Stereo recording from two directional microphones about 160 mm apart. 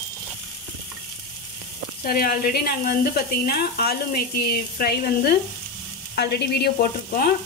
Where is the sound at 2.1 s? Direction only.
65° left (ahead or behind).